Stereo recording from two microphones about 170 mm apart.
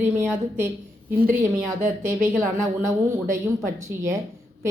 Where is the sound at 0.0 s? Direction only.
15° right (ahead or behind).